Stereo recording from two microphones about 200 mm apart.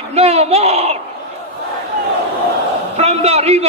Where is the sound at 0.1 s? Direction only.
30° right (ahead or behind).